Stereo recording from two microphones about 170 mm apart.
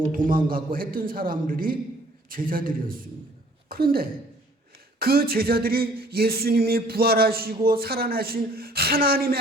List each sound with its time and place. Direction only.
0.3 s speech: 55° right (ahead or behind)